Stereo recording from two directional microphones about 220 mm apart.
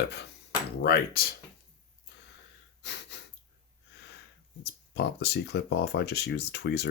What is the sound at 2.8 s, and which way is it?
Breathing, 50° left (ahead or behind).